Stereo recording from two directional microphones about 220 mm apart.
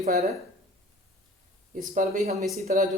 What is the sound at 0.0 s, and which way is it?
Speech, 30° right (ahead or behind).